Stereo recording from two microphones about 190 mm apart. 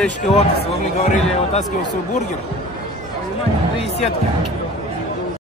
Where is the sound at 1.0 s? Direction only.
35° left (ahead or behind).